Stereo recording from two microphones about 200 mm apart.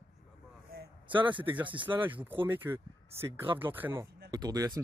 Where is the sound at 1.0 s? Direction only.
25° right (ahead or behind).